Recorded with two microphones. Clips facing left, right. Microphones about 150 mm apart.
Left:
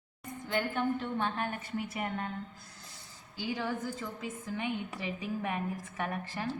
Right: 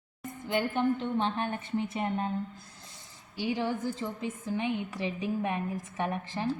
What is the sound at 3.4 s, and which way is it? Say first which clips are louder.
A woman's voice: right 4 dB; 20° right (ahead or behind).